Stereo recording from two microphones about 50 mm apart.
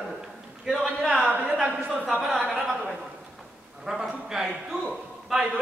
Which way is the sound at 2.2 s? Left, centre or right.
Centre.